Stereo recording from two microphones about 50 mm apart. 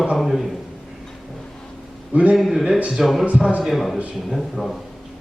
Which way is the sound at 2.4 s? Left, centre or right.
Centre.